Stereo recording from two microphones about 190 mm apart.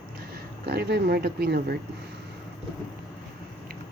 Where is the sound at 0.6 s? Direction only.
55° right (ahead or behind).